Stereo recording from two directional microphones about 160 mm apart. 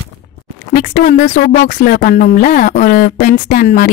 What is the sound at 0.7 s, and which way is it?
A woman's voice, 55° left (ahead or behind).